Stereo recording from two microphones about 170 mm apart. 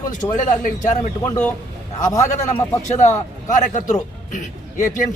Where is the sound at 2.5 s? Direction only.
45° left (ahead or behind).